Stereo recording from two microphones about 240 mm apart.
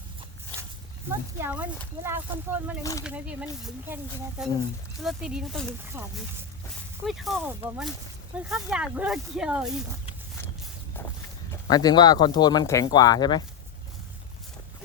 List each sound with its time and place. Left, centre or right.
1.4 s speech: centre
11.7 s speech: centre